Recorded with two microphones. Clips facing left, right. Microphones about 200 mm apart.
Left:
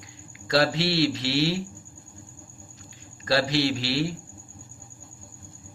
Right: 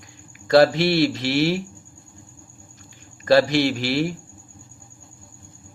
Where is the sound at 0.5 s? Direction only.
50° right (ahead or behind).